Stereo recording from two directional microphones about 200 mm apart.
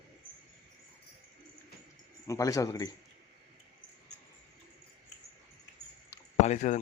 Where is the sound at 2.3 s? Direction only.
15° left (ahead or behind).